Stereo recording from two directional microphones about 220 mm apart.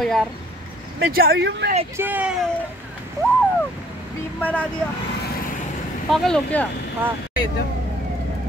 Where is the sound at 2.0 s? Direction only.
5° right (ahead or behind).